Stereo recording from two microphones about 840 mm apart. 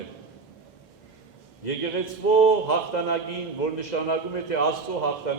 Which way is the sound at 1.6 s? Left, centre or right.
Left.